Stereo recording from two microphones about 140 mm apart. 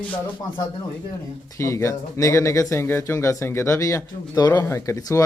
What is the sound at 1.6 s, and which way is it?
Speech, 20° left (ahead or behind).